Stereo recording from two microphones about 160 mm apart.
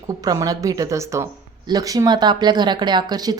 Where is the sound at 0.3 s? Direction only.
20° right (ahead or behind).